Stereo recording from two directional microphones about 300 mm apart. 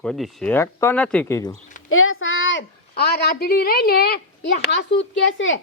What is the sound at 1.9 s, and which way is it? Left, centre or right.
Speech, left.